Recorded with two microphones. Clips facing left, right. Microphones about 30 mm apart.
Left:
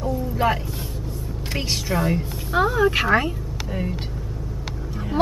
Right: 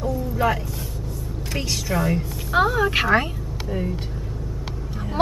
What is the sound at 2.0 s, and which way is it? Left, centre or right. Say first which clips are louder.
Speech: even; centre.